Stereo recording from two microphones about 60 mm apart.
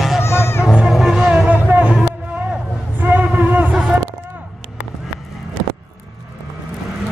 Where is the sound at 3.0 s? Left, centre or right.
Right.